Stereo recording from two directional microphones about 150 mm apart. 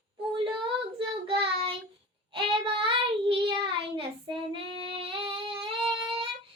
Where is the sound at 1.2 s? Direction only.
35° right (ahead or behind).